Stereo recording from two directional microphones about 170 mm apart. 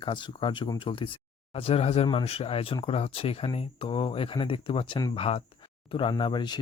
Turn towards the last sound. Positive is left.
turn(degrees=25)  # may be behind; listen again after turning